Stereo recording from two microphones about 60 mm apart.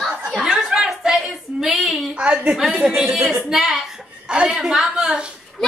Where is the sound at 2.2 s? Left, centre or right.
Centre.